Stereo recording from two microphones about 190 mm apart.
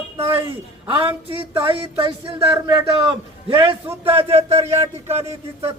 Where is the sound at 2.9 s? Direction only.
30° right (ahead or behind).